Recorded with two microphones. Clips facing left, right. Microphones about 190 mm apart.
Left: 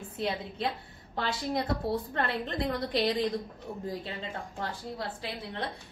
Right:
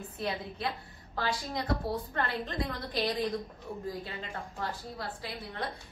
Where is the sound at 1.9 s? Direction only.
25° left (ahead or behind).